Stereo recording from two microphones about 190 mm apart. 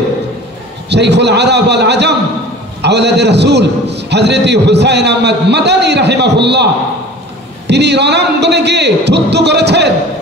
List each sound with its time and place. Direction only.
0.8 s a man's voice: 65° right (ahead or behind)